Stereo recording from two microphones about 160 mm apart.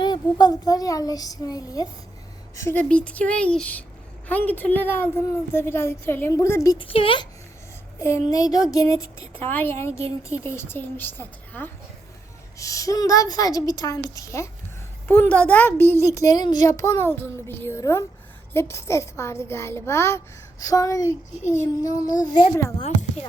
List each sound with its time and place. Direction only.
0.0 s a woman's voice: 25° left (ahead or behind)
6.8 s speech: 35° left (ahead or behind)
8.3 s a woman's voice: 20° left (ahead or behind)
22.8 s speech: 40° left (ahead or behind)